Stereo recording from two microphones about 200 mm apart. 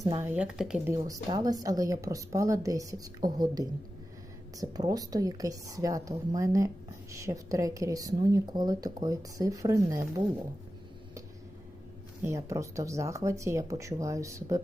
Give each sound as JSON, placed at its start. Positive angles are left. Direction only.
{"t": 0.0, "sound": "speech", "side_deg": -15}
{"t": 1.0, "sound": "speech", "side_deg": -20}
{"t": 12.2, "sound": "speech", "side_deg": -15}